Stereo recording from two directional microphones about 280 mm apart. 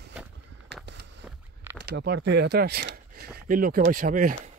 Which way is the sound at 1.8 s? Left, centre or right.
Right.